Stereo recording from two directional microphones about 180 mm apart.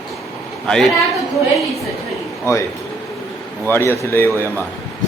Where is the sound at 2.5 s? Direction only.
15° left (ahead or behind).